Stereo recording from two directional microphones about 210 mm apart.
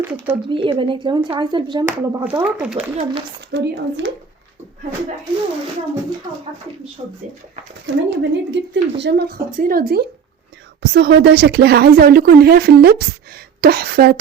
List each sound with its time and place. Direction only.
0.4 s speech: 25° right (ahead or behind); by 2.9 s 5° right (ahead or behind)
3.5 s speech: 60° right (ahead or behind)
7.0 s speech: 25° right (ahead or behind)
8.1 s speech: 60° right (ahead or behind)